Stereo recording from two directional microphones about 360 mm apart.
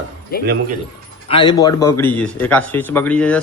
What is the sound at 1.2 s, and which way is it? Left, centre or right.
A man's voice, centre.